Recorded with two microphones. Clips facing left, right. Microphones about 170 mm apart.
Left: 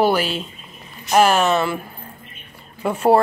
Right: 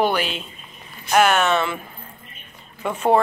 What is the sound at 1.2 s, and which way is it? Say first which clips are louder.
Speech: left 2 dB; 30° left (ahead or behind).